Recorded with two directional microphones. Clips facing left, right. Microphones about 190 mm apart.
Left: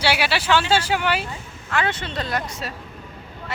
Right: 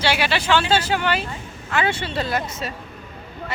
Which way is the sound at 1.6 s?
5° right (ahead or behind).